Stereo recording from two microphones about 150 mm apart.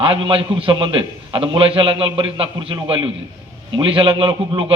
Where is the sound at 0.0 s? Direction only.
35° right (ahead or behind).